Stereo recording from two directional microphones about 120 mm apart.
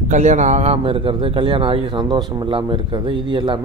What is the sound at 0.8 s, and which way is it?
A man's voice, 45° right (ahead or behind).